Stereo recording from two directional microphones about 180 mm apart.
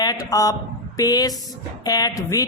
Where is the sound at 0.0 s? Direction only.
20° left (ahead or behind).